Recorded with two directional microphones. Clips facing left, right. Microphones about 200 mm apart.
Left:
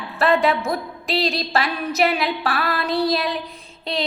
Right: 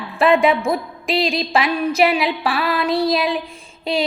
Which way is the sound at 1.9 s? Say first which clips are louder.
Right 1 dB; centre (ahead or behind).